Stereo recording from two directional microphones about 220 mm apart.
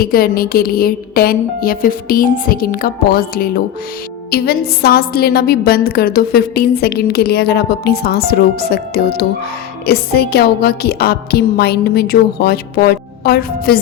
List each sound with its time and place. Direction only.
0.0 s music: 40° left (ahead or behind)
4.3 s a woman's voice: 45° left (ahead or behind)